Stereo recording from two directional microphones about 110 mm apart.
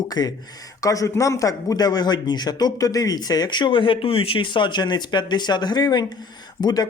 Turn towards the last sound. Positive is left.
turn(degrees=35)  # may be behind; listen again after turning